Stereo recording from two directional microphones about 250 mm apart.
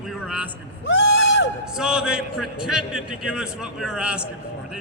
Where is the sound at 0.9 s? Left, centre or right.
Left.